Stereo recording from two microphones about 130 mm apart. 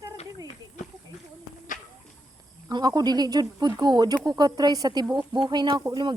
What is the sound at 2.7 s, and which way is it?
Speech, 30° right (ahead or behind).